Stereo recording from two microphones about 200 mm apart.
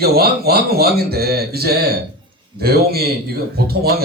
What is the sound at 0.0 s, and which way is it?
Speech, 50° right (ahead or behind).